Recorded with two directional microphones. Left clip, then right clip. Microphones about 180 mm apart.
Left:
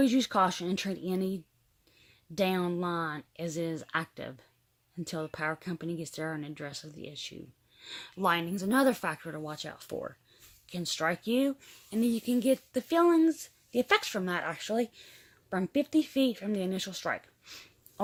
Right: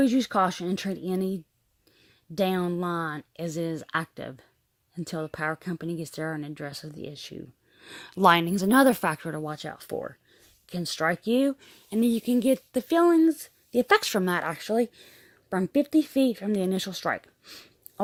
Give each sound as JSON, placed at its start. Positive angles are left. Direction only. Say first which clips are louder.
{"t": 0.0, "sound": "speech", "louder": "right 3 dB", "side_deg": -30}